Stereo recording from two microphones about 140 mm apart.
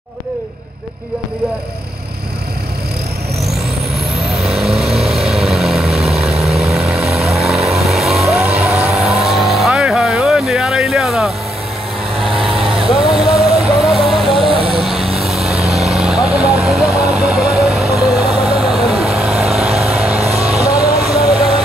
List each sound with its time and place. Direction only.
4.6 s vehicle: centre (ahead or behind)
20.2 s vehicle: 50° right (ahead or behind)